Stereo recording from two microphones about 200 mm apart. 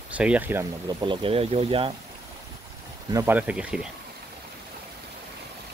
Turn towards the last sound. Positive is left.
turn(degrees=-5)  # may be behind; listen again after turning